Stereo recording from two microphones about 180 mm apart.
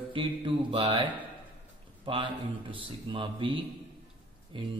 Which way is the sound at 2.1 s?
25° right (ahead or behind).